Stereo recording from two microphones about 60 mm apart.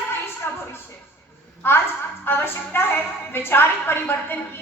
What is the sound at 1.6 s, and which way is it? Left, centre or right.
A woman's voice, left.